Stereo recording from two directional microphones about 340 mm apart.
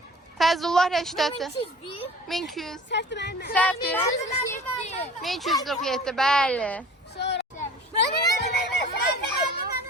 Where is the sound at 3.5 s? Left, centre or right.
Centre.